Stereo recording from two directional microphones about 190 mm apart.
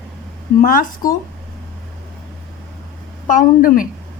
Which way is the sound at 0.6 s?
45° left (ahead or behind).